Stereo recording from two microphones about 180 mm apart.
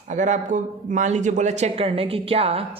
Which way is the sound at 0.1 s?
40° right (ahead or behind).